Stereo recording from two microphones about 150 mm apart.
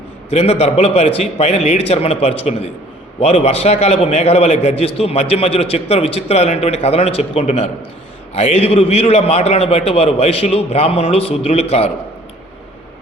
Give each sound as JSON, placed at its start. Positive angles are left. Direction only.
{"t": 0.3, "sound": "a man's voice", "side_deg": 45}